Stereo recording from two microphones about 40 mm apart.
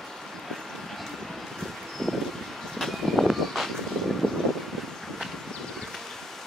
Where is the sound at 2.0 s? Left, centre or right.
Centre.